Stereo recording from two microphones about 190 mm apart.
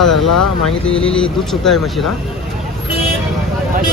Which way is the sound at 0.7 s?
90° left.